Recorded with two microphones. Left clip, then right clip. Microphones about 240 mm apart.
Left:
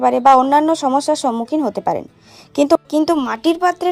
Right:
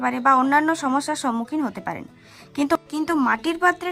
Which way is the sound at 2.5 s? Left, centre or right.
Centre.